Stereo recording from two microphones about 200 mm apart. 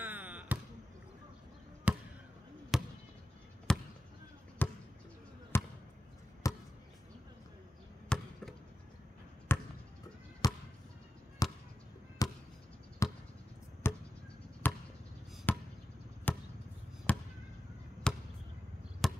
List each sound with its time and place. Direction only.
0.0 s basketball bounce: 10° right (ahead or behind)
1.9 s basketball bounce: 5° right (ahead or behind); by 6.6 s 15° left (ahead or behind)
8.1 s basketball bounce: 5° left (ahead or behind)
9.5 s basketball bounce: 10° left (ahead or behind)
13.8 s a sound: 10° left (ahead or behind)
14.6 s basketball bounce: 10° left (ahead or behind)
15.5 s chop: 10° left (ahead or behind)
16.3 s basketball bounce: 10° left (ahead or behind)
17.1 s fireworks: 5° left (ahead or behind)
18.1 s basketball bounce: 5° left (ahead or behind)